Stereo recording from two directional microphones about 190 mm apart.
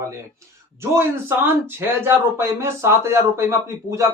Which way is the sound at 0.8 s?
10° right (ahead or behind).